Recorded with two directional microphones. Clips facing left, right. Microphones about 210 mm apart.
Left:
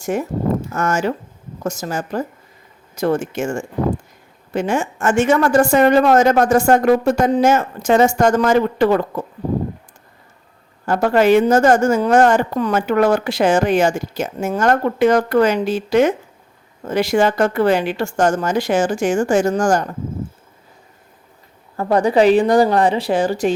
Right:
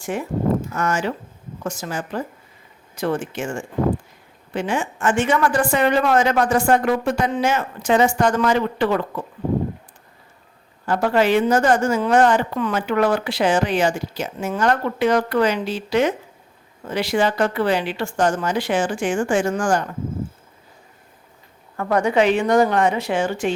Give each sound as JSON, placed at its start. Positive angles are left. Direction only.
{"t": 0.0, "sound": "a woman's voice", "side_deg": 45}
{"t": 10.8, "sound": "a woman's voice", "side_deg": 45}
{"t": 21.8, "sound": "a woman's voice", "side_deg": 35}